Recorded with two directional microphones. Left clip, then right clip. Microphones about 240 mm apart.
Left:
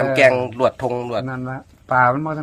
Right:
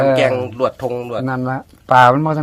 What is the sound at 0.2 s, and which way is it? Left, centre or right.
Speech, left.